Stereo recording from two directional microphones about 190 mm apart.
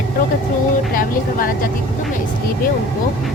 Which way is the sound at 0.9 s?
50° left (ahead or behind).